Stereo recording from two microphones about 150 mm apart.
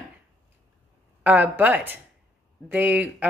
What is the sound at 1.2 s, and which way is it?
Speech, 10° right (ahead or behind).